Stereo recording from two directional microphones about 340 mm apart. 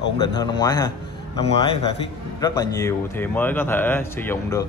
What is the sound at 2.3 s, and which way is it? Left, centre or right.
A man's voice, centre.